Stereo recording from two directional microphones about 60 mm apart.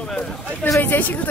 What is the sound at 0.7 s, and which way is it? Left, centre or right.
Speech, left.